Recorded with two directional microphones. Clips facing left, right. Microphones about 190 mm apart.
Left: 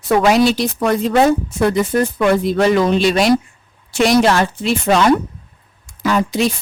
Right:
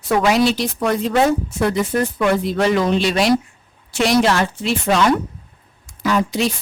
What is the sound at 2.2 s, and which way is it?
Speech, 40° left (ahead or behind).